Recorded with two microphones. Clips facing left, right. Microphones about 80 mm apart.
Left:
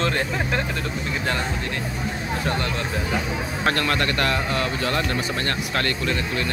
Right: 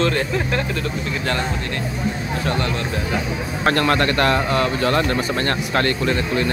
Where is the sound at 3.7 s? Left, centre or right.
Right.